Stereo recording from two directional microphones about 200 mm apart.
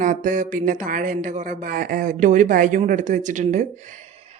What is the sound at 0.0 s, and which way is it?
Speech, 40° right (ahead or behind).